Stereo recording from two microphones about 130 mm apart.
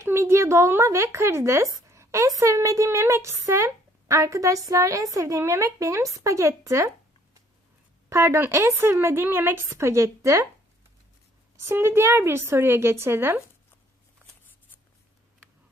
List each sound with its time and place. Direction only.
0.0 s a woman's voice: 20° right (ahead or behind)
8.1 s a woman's voice: 20° right (ahead or behind)
11.7 s a woman's voice: 20° right (ahead or behind)